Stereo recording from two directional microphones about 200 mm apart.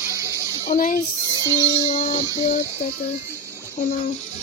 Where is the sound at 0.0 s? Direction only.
15° right (ahead or behind).